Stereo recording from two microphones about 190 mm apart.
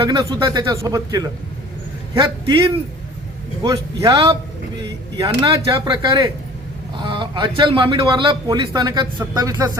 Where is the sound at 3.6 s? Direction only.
20° right (ahead or behind).